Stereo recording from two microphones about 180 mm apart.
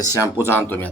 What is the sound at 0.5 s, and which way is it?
Speech, 10° left (ahead or behind).